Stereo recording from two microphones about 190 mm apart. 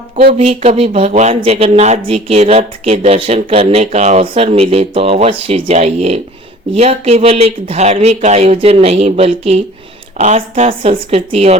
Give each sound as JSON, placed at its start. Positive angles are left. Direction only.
{"t": 0.3, "sound": "speech", "side_deg": -35}